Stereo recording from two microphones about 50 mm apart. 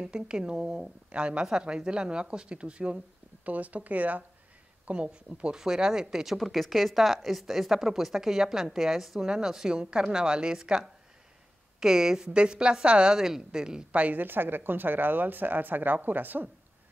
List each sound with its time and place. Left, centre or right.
0.0 s a woman's voice: centre
6.3 s a woman's voice: centre
13.9 s speech: right
14.2 s speech: right